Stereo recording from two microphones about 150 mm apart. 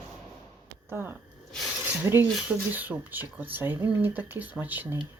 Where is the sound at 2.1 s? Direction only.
20° right (ahead or behind).